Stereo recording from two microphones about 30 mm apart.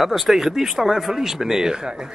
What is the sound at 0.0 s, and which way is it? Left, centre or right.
Speech, centre.